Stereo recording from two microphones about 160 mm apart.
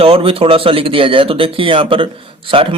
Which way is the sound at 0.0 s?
35° right (ahead or behind).